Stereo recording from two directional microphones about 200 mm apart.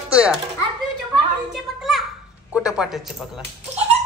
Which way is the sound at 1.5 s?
Centre (ahead or behind).